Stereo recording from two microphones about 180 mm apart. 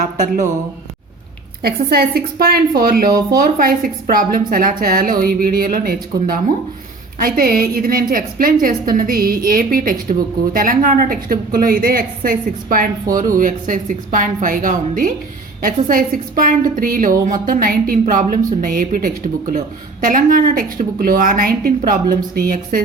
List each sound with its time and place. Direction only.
1.6 s a woman's voice: 60° right (ahead or behind)
3.1 s speech: 20° right (ahead or behind)
3.3 s a woman's voice: 55° right (ahead or behind)